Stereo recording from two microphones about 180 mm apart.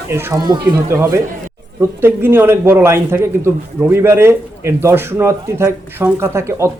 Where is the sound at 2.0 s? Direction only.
10° right (ahead or behind).